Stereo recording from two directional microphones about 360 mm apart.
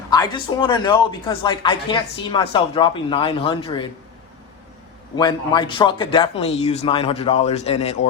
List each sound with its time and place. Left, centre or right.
0.1 s speech: centre
5.1 s speech: centre